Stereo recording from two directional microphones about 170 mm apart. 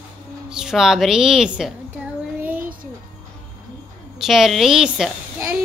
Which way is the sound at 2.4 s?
10° right (ahead or behind).